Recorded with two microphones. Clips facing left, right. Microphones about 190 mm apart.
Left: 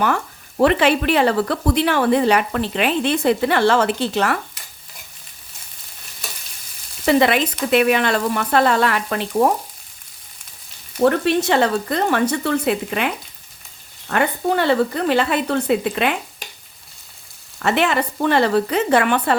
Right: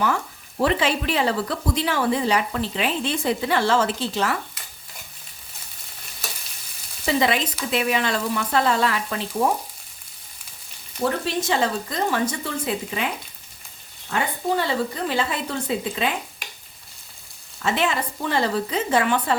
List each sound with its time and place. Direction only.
0.0 s speech: 65° left (ahead or behind)
7.0 s frying: 65° left (ahead or behind)
7.7 s speech: 60° left (ahead or behind)
11.0 s speech: 65° left (ahead or behind)
14.1 s speech: 65° left (ahead or behind)
17.6 s speech: 65° left (ahead or behind)